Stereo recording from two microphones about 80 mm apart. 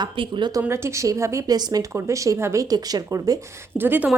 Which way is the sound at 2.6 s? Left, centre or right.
Right.